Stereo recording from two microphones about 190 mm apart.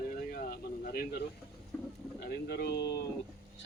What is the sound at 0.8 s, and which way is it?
A man's voice, 50° left (ahead or behind).